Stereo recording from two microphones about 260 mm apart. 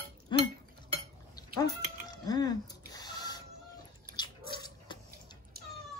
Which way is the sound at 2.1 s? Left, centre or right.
Centre.